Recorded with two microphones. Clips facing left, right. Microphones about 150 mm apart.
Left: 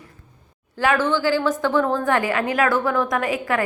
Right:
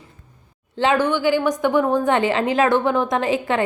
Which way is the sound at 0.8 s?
20° right (ahead or behind).